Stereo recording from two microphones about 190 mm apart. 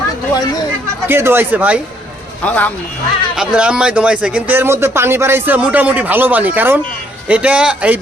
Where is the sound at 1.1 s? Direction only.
10° right (ahead or behind).